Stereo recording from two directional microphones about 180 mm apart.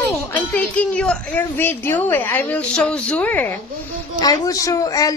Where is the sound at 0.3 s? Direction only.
10° left (ahead or behind).